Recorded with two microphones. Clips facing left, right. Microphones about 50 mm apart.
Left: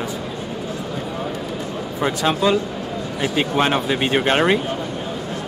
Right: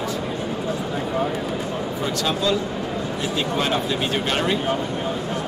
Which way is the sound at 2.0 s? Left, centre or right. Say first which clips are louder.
Left 5 dB; left.